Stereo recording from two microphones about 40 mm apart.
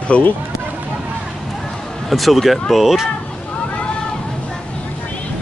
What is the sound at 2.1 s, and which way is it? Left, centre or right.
Speech, centre.